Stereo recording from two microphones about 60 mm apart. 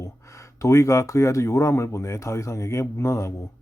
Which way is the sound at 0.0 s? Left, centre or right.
Left.